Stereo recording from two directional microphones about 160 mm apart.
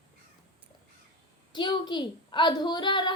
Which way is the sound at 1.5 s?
30° left (ahead or behind).